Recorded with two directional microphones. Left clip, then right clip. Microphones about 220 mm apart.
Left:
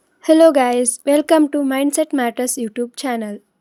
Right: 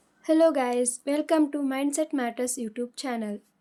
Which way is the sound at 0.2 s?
40° left (ahead or behind).